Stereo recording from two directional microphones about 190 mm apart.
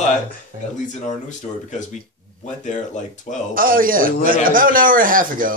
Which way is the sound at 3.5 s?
50° right (ahead or behind).